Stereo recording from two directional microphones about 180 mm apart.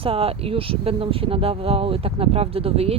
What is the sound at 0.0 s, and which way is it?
Speech, 30° right (ahead or behind).